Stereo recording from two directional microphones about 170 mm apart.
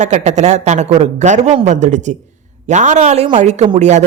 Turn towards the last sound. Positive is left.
turn(degrees=-45)  # may be behind; listen again after turning